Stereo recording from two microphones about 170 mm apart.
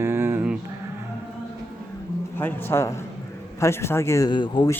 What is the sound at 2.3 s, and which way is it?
Speech, 10° left (ahead or behind).